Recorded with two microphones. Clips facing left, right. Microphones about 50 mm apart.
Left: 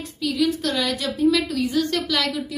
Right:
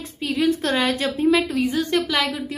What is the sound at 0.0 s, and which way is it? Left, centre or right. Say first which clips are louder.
A woman's voice: right 1 dB; right.